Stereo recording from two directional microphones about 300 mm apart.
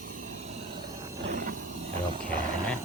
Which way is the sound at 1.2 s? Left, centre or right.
Right.